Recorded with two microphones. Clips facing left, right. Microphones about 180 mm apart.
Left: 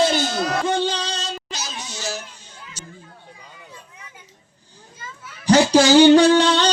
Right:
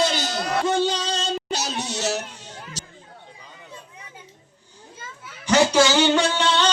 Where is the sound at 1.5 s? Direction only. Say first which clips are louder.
Right 6 dB; 70° right (ahead or behind).